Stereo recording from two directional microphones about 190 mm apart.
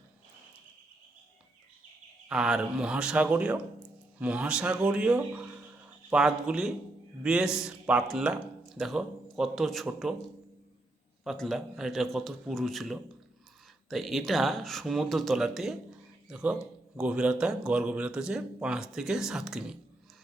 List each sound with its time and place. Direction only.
2.3 s speech: 5° right (ahead or behind)
11.2 s speech: centre (ahead or behind)